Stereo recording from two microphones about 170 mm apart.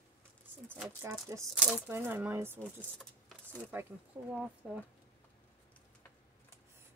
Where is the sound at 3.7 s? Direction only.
10° right (ahead or behind).